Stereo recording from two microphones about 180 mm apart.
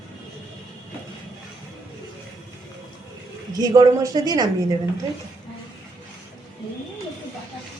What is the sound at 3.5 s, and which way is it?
A woman's voice, 20° right (ahead or behind).